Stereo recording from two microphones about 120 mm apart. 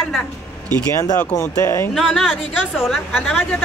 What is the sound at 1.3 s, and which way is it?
Speech, 20° left (ahead or behind).